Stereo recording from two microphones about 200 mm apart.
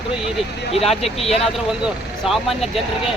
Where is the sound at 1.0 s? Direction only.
30° left (ahead or behind).